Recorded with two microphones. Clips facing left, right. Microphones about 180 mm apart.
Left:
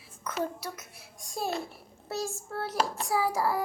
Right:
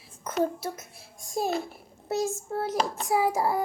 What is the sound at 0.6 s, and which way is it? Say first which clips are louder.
A child's voice: right 5 dB; 25° right (ahead or behind).